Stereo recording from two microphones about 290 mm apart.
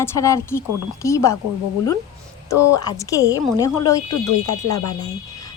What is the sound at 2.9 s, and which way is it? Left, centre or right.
Speech, centre.